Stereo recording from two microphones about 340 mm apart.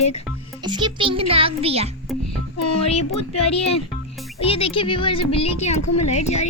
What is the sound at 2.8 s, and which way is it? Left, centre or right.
Speech, centre.